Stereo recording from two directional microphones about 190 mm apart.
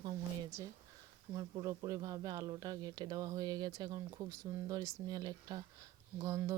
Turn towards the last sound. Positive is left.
turn(degrees=-15)  # may be behind; listen again after turning